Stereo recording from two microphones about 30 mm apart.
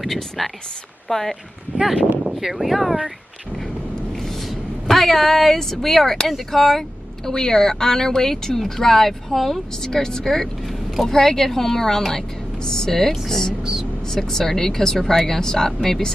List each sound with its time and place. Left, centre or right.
0.0 s speech: centre
2.5 s speech: centre
4.1 s a sound: centre
6.5 s speech: centre
9.8 s speech: left
10.7 s vehicle: centre
11.1 s speech: centre
13.6 s speech: right
14.0 s speech: centre